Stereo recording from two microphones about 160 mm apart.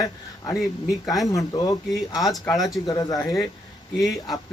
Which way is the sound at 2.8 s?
25° left (ahead or behind).